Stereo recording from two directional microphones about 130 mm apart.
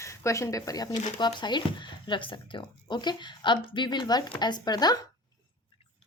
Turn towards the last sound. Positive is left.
turn(degrees=30)  # may be behind; listen again after turning